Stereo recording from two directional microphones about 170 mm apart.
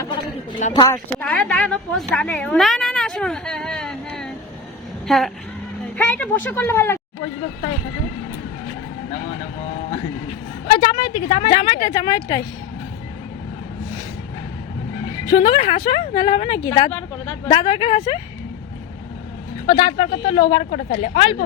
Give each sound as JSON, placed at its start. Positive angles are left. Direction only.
{"t": 0.7, "sound": "a woman's voice", "side_deg": 20}
{"t": 1.2, "sound": "a woman's voice", "side_deg": 5}
{"t": 10.7, "sound": "a woman's voice", "side_deg": 25}
{"t": 15.3, "sound": "a woman's voice", "side_deg": 30}
{"t": 19.6, "sound": "speech", "side_deg": 30}